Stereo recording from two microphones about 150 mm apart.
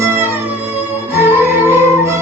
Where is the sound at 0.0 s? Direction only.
15° right (ahead or behind).